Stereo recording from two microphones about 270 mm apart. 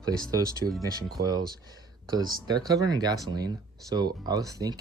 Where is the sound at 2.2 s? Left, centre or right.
Centre.